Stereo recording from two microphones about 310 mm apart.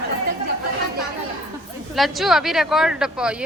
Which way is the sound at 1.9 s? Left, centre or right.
Centre.